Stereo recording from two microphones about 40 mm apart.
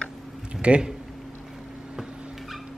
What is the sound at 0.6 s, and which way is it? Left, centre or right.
Speech, right.